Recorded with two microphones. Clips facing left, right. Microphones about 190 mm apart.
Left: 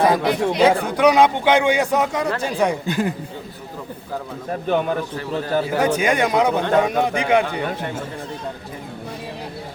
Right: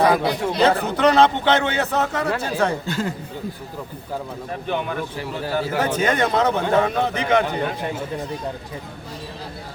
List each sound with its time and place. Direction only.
0.0 s a man's voice: 20° left (ahead or behind)
4.7 s speech: 45° left (ahead or behind)
5.6 s a man's voice: 10° left (ahead or behind)